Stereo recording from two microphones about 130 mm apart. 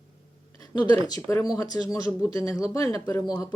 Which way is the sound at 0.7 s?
30° left (ahead or behind).